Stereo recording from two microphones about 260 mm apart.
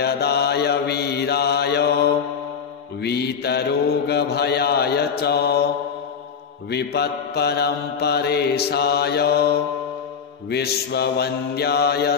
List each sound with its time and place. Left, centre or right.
0.0 s mantra: left
6.7 s mantra: left